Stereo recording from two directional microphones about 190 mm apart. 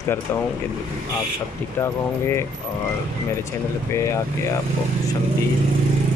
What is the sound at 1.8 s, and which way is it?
Speech, 15° left (ahead or behind).